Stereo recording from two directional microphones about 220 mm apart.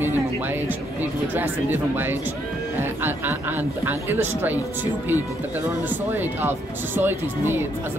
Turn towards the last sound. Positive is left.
turn(degrees=-10)  # may be behind; listen again after turning